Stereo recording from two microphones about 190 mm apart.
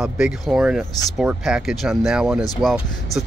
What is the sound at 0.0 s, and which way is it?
Speech, 5° right (ahead or behind).